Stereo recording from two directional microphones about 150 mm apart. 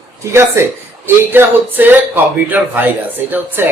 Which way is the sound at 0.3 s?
15° right (ahead or behind).